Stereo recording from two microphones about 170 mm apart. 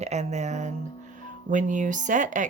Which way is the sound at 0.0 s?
40° right (ahead or behind).